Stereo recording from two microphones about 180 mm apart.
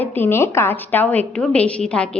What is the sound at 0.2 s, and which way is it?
A woman's voice, 15° left (ahead or behind).